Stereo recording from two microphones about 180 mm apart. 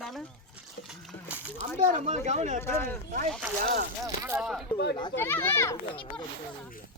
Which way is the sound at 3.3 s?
5° right (ahead or behind).